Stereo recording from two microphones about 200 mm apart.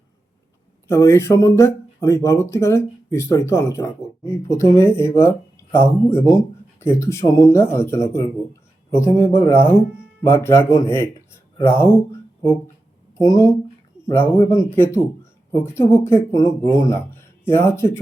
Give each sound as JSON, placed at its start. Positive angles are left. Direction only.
{"t": 0.9, "sound": "speech", "side_deg": 15}